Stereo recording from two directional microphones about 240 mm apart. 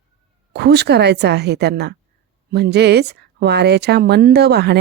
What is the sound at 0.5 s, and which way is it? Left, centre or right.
A woman's voice, right.